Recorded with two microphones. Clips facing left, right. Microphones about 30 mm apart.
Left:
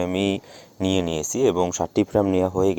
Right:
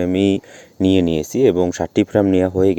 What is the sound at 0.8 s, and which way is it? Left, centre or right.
Speech, right.